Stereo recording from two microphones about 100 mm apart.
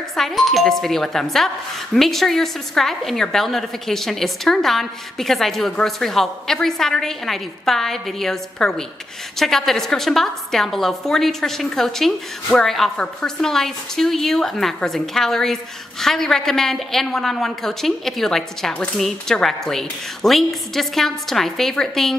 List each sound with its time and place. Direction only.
0.1 s a woman's voice: centre (ahead or behind)